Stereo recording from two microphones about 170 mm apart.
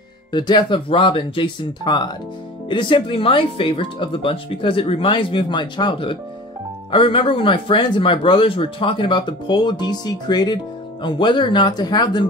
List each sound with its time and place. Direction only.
0.3 s speech: 25° left (ahead or behind)